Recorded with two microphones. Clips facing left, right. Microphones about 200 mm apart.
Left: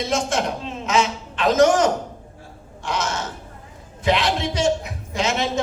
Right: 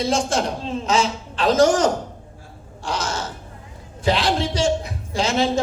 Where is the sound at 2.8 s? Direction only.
30° right (ahead or behind).